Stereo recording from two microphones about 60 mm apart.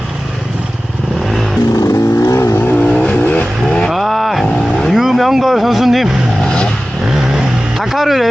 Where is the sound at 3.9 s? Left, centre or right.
Centre.